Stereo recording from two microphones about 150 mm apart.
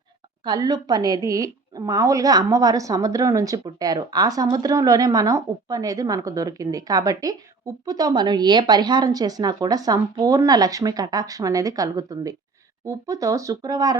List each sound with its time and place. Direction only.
0.4 s a woman's voice: 25° right (ahead or behind)